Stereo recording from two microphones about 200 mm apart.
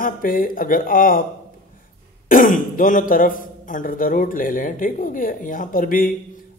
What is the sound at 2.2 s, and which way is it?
Speech, 45° left (ahead or behind).